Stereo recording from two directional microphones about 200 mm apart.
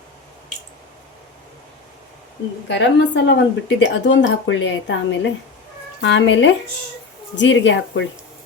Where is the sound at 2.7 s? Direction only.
65° left (ahead or behind).